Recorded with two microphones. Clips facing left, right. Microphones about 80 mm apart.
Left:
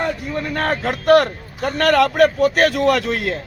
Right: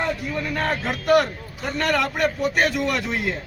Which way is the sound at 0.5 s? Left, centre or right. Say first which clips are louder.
Left 5 dB; left.